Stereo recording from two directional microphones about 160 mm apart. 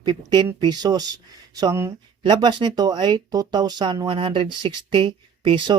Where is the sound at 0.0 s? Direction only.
25° right (ahead or behind).